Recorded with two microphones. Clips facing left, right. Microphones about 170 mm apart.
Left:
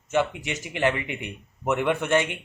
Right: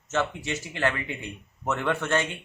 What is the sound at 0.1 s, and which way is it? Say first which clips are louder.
Speech: left 3 dB; 15° left (ahead or behind).